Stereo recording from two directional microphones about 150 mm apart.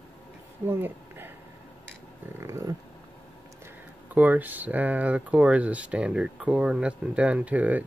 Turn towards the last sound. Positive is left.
turn(degrees=-10)  # may be behind; listen again after turning